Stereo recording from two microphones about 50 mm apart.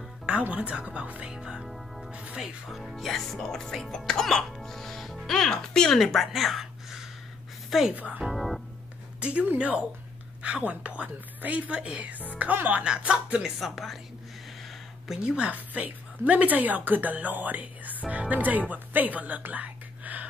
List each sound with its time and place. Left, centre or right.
0.4 s a woman's voice: right
1.2 s music: centre
1.6 s music: centre
2.0 s music: right
2.7 s speech: centre
5.9 s a woman's voice: centre
7.9 s a woman's voice: right
8.3 s keyboard: centre
9.2 s a woman's voice: right
12.8 s a woman's voice: centre
13.6 s speech: centre
15.2 s a woman's voice: right
15.5 s a woman's voice: right